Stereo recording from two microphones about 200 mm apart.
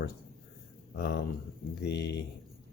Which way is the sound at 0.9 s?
55° left (ahead or behind).